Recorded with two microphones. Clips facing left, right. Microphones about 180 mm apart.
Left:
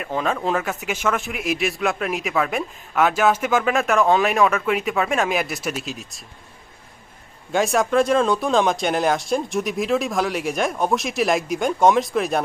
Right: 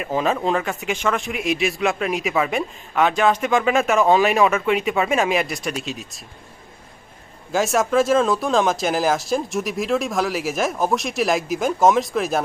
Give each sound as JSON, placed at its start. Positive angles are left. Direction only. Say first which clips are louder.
{"t": 0.0, "sound": "speech", "louder": "right 2 dB", "side_deg": -5}
{"t": 7.5, "sound": "speech", "louder": "even", "side_deg": 0}